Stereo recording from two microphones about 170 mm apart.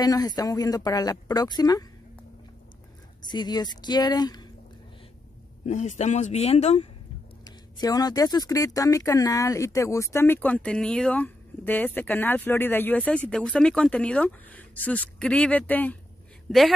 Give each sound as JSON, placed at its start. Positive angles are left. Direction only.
{"t": 0.0, "sound": "speech", "side_deg": 20}
{"t": 3.3, "sound": "speech", "side_deg": 25}
{"t": 5.7, "sound": "speech", "side_deg": 45}
{"t": 7.4, "sound": "speech", "side_deg": 20}